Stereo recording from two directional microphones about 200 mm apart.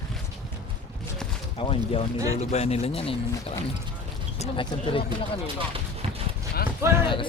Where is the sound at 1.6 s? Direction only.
25° left (ahead or behind).